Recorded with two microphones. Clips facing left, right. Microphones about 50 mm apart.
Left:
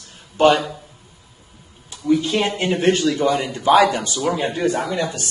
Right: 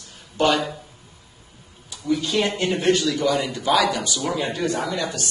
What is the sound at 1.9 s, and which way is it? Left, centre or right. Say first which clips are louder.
Speech: left 4 dB; left.